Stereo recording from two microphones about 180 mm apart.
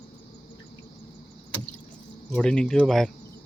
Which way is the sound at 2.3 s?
5° left (ahead or behind).